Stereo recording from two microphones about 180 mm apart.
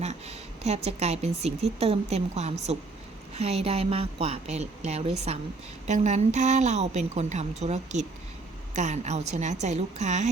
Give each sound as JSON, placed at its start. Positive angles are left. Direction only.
{"t": 0.0, "sound": "a woman's voice", "side_deg": -35}